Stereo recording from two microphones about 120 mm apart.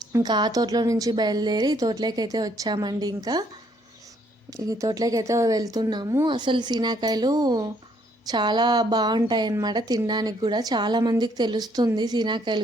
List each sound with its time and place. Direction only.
0.1 s a woman's voice: 35° right (ahead or behind)
4.5 s a woman's voice: 30° right (ahead or behind)